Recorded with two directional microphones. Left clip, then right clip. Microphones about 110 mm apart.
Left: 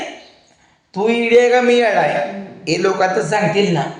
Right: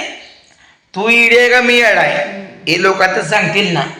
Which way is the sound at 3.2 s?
5° left (ahead or behind).